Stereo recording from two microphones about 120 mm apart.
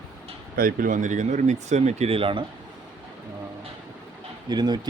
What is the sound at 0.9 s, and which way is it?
Speech, 90° right.